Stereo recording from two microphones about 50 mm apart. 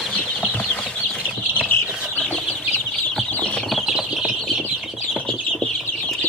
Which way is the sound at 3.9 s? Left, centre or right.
Centre.